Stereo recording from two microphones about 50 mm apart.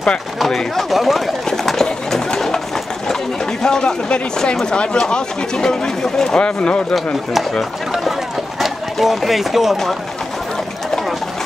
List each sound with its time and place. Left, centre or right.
0.8 s speech: centre
1.7 s a sound: centre
3.6 s speech: centre
8.5 s speech: centre